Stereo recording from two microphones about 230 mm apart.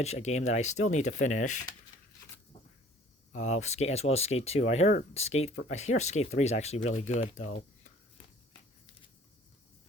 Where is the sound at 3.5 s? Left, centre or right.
Left.